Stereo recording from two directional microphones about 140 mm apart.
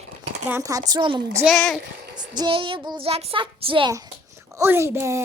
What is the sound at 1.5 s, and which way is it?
Speech, centre (ahead or behind).